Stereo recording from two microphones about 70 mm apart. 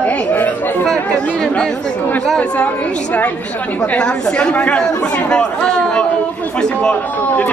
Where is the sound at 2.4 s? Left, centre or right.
Centre.